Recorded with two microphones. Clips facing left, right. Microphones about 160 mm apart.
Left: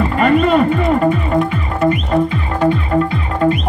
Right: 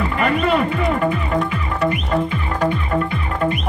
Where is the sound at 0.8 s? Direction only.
40° left (ahead or behind).